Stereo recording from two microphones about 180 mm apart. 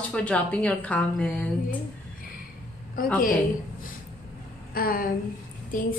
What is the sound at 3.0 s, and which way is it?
Speech, 55° left (ahead or behind).